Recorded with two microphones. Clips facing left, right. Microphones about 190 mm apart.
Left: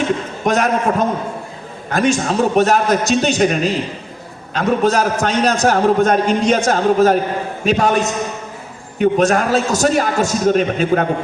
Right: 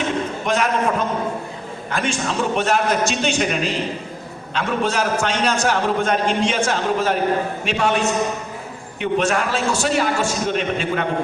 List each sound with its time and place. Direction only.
0.4 s a man's voice: 45° left (ahead or behind)